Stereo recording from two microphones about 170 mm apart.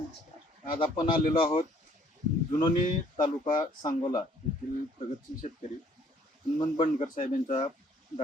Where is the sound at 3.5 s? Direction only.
20° left (ahead or behind).